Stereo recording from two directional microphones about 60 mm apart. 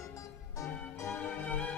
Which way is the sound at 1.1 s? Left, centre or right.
Left.